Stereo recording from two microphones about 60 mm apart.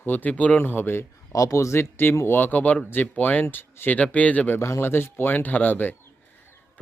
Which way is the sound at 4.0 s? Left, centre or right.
Left.